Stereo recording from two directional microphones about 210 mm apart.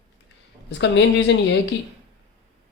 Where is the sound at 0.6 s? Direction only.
55° left (ahead or behind).